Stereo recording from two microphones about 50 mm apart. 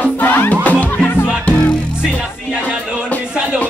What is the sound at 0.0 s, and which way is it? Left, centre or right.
Music, left.